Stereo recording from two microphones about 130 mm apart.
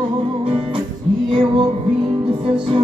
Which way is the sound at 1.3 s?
40° right (ahead or behind).